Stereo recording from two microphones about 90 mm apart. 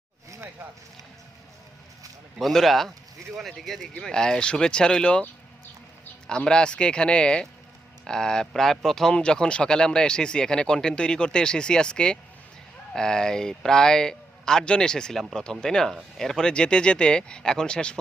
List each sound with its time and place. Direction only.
0.6 s run: 25° right (ahead or behind)
2.4 s speech: centre (ahead or behind)
6.2 s speech: 10° left (ahead or behind)